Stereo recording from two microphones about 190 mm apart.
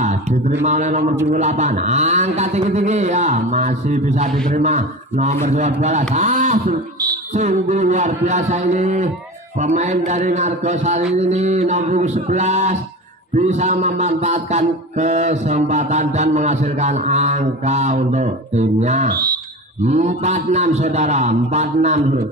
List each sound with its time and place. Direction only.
0.0 s a sound: 35° right (ahead or behind)
0.7 s music: 40° right (ahead or behind)
6.1 s a man's voice: 40° right (ahead or behind)
7.3 s music: 35° right (ahead or behind)